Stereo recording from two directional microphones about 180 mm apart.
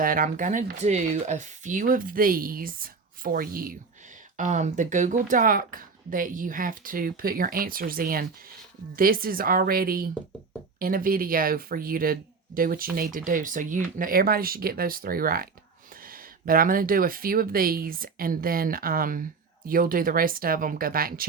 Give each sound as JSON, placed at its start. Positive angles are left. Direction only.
{"t": 0.0, "sound": "speech", "side_deg": -50}